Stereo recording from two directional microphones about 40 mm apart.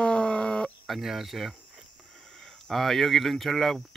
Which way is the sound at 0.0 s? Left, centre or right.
Left.